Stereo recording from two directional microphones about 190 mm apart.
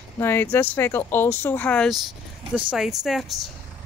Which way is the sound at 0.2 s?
10° left (ahead or behind).